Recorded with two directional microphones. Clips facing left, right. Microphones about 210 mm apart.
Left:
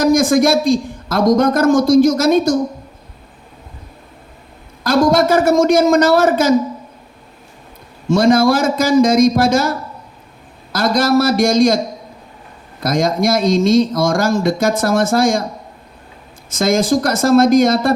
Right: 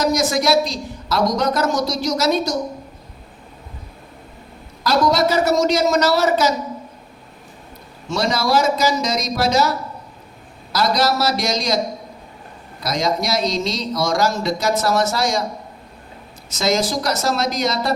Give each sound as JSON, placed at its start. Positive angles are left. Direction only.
{"t": 0.0, "sound": "speech", "side_deg": 50}
{"t": 4.8, "sound": "speech", "side_deg": 50}
{"t": 8.0, "sound": "speech", "side_deg": 50}
{"t": 12.8, "sound": "speech", "side_deg": 50}
{"t": 16.5, "sound": "speech", "side_deg": 50}